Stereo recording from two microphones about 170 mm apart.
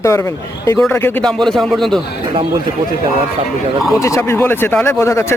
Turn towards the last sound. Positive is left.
turn(degrees=15)  # may be behind; listen again after turning